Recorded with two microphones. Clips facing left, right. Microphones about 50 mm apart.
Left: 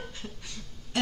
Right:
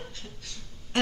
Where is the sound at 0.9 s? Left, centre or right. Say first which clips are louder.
Right 2 dB; right.